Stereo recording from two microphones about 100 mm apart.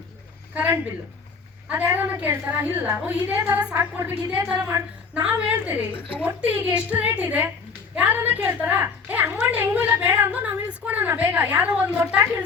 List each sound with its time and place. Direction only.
0.5 s a woman's voice: 20° right (ahead or behind)
4.7 s a woman's voice: 30° right (ahead or behind)
5.3 s a woman's voice: 20° right (ahead or behind)